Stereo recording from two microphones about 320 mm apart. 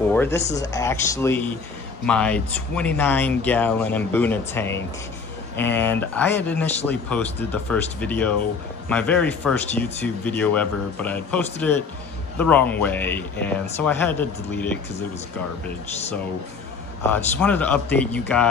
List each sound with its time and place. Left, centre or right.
0.1 s speech: centre
0.4 s speech: left
0.7 s speech: centre
17.4 s speech: centre